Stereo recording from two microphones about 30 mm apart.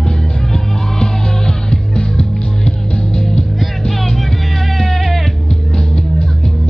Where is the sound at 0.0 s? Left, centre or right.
Centre.